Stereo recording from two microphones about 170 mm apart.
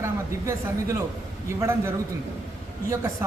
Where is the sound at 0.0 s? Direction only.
15° right (ahead or behind).